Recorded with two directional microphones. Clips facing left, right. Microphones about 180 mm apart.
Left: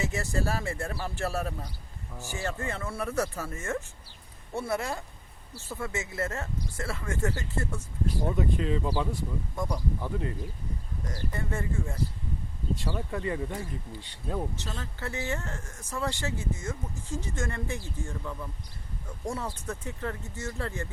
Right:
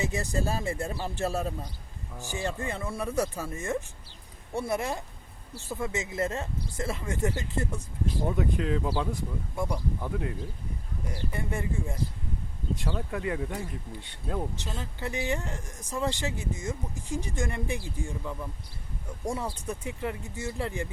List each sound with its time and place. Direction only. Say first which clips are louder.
0.0 s speech: right 1 dB; 20° right (ahead or behind)
8.3 s speech: right 1 dB; centre (ahead or behind)
12.8 s speech: right 1 dB; centre (ahead or behind)
14.5 s speech: right 1 dB; 15° right (ahead or behind)